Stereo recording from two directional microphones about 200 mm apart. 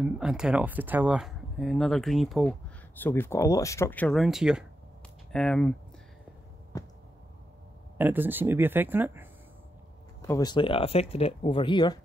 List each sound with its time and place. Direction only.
0.0 s speech: 5° right (ahead or behind)
3.0 s speech: 10° left (ahead or behind)
8.0 s speech: 10° right (ahead or behind)
10.2 s speech: 20° left (ahead or behind)